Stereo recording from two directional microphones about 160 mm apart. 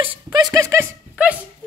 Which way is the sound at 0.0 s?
30° right (ahead or behind).